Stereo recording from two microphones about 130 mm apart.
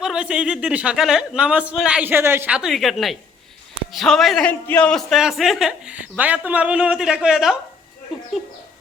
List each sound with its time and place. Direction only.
0.0 s speech: 5° right (ahead or behind)
2.6 s a man's voice: centre (ahead or behind)